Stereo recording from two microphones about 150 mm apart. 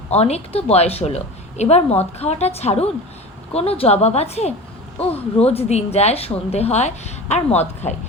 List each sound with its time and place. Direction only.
0.1 s a woman's voice: 45° left (ahead or behind)